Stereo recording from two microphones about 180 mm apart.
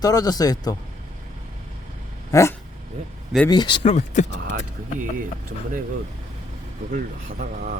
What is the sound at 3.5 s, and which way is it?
Speech, 25° left (ahead or behind).